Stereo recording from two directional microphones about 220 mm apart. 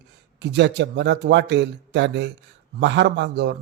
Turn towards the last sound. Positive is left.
turn(degrees=-50)  # may be behind; listen again after turning